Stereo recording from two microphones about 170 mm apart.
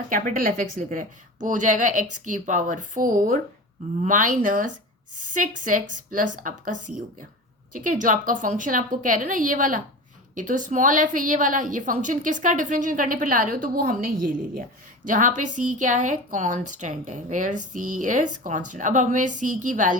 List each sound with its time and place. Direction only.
0.1 s a woman's voice: 55° right (ahead or behind)